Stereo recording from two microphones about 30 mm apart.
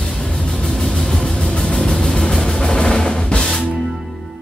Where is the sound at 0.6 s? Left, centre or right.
Centre.